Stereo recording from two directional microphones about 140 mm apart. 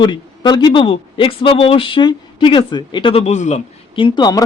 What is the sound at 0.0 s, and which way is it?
Speech, 30° left (ahead or behind).